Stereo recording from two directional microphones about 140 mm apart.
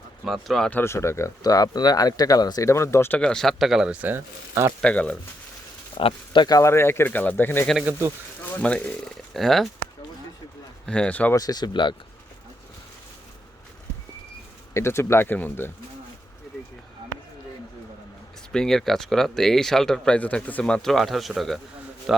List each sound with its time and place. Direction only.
0.3 s speech: centre (ahead or behind)
4.8 s speech: 10° left (ahead or behind)
6.0 s speech: 40° left (ahead or behind); by 9.6 s centre (ahead or behind)
10.8 s speech: 5° left (ahead or behind)
11.3 s speech: 25° left (ahead or behind)
14.7 s speech: 20° left (ahead or behind)
18.5 s speech: 5° left (ahead or behind)